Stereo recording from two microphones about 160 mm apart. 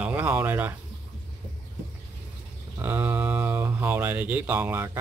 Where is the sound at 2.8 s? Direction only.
10° right (ahead or behind).